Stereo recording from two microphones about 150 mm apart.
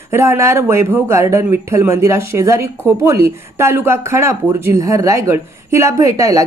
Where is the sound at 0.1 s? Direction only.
15° right (ahead or behind).